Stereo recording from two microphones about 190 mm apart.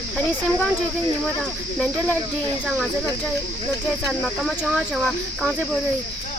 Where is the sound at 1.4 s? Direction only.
5° left (ahead or behind).